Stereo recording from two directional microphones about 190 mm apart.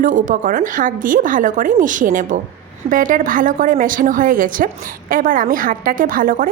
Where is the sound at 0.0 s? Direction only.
45° right (ahead or behind).